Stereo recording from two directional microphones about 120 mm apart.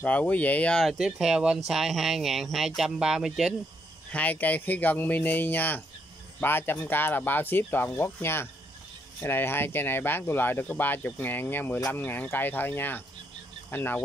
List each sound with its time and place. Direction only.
0.0 s speech: 10° left (ahead or behind)
0.9 s speech: 5° right (ahead or behind)
4.1 s speech: 10° left (ahead or behind)